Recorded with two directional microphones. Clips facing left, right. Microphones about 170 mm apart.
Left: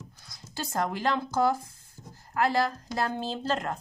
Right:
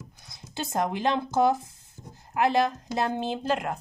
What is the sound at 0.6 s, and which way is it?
Speech, 20° right (ahead or behind).